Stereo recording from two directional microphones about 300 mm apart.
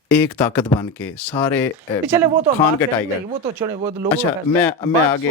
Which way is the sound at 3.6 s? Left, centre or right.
Centre.